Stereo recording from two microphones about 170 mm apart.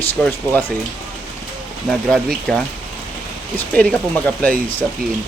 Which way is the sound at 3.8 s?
5° left (ahead or behind).